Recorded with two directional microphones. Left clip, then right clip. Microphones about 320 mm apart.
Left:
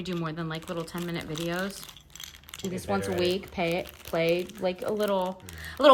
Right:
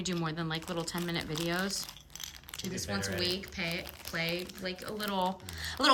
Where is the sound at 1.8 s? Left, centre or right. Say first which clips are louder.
Right 1 dB; centre.